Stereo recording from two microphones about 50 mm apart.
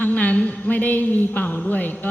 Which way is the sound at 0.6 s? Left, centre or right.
Left.